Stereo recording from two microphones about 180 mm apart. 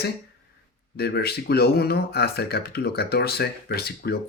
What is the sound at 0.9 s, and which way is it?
Speech, 60° left (ahead or behind).